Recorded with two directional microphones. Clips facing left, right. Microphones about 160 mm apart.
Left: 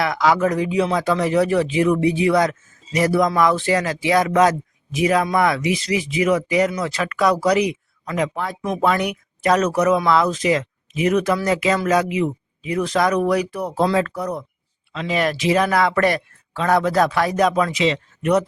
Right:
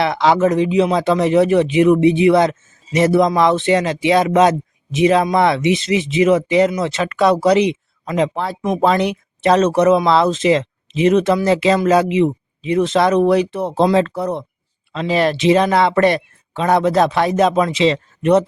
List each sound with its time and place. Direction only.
0.0 s speech: 25° right (ahead or behind)